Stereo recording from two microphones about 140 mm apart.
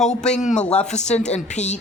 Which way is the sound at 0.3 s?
55° left (ahead or behind).